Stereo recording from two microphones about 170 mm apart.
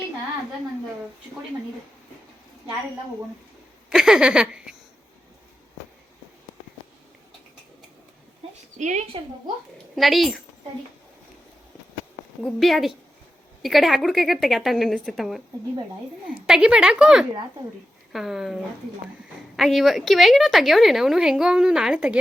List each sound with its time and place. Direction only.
3.8 s speech: 5° right (ahead or behind)
8.8 s a woman's voice: 45° right (ahead or behind)
9.9 s a woman's voice: centre (ahead or behind)
12.4 s a woman's voice: centre (ahead or behind)
16.5 s a woman's voice: 5° right (ahead or behind)